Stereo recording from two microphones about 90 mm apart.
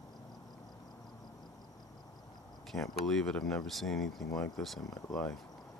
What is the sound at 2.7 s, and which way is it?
Speech, 5° left (ahead or behind).